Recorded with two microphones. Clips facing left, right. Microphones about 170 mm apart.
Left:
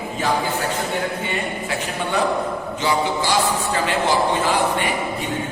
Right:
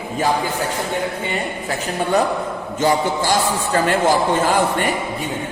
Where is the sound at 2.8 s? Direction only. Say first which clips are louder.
Right 4 dB; 45° right (ahead or behind).